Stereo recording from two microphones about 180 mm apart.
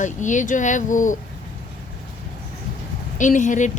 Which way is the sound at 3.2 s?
45° left (ahead or behind).